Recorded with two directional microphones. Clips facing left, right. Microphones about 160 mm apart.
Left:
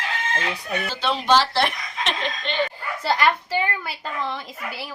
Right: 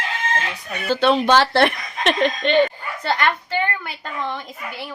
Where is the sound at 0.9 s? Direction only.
55° right (ahead or behind).